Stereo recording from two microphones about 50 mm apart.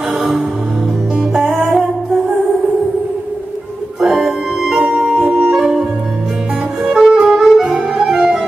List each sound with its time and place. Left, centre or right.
1.1 s music: centre
4.0 s music: centre
4.7 s music: right
7.1 s music: centre